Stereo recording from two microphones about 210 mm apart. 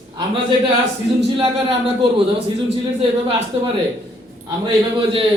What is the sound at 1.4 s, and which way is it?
Speech, 25° right (ahead or behind).